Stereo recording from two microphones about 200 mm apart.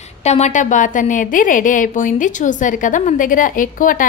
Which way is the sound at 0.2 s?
35° left (ahead or behind).